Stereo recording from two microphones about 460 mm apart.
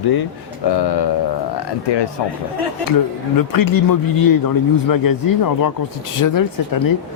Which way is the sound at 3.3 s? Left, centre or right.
Left.